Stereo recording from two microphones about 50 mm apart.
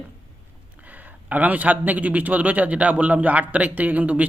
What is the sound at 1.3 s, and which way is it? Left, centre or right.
A man's voice, right.